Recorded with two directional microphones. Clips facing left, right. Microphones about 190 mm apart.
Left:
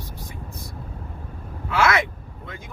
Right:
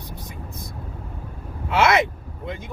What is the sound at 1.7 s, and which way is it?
Speech, 25° right (ahead or behind).